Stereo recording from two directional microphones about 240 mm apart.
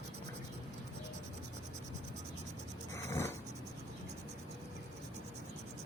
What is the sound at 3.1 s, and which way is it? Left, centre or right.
Vehicle, centre.